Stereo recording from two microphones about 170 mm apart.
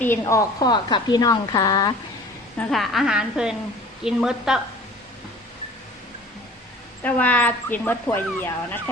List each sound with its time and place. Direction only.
0.0 s a woman's voice: 15° left (ahead or behind)
2.6 s a woman's voice: centre (ahead or behind)
7.0 s speech: 10° left (ahead or behind)